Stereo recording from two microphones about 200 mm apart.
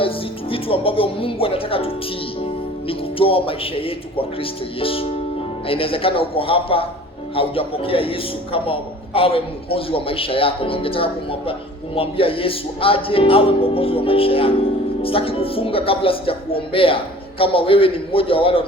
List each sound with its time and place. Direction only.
0.5 s a man's voice: 25° left (ahead or behind)